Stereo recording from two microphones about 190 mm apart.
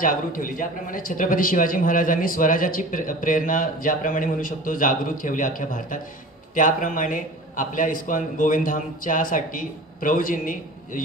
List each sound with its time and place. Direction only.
0.0 s a man's voice: 45° left (ahead or behind)